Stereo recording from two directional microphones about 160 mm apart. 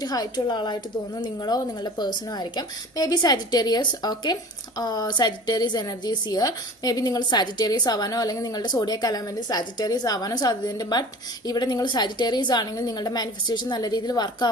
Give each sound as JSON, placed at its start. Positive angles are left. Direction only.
{"t": 0.0, "sound": "a woman's voice", "side_deg": 25}